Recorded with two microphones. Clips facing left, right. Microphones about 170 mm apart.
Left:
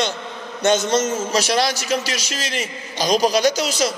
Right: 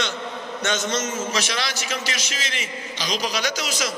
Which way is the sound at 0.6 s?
35° left (ahead or behind).